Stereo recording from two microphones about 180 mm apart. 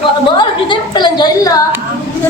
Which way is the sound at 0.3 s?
25° left (ahead or behind).